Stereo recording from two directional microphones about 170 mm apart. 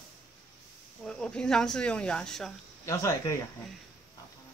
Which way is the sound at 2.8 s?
20° left (ahead or behind).